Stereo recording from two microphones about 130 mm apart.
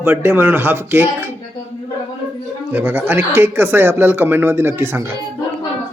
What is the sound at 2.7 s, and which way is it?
A man's voice, 15° right (ahead or behind).